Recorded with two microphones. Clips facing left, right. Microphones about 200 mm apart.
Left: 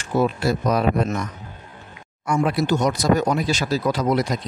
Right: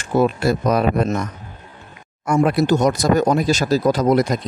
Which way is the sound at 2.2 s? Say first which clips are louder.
Right 4 dB; 50° right (ahead or behind).